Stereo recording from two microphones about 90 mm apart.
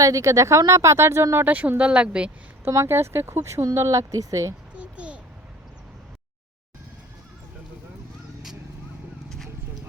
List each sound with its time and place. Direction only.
0.0 s speech: 35° right (ahead or behind)
1.5 s speech: 20° right (ahead or behind)
2.6 s speech: 30° right (ahead or behind)
4.7 s a sound: 15° right (ahead or behind)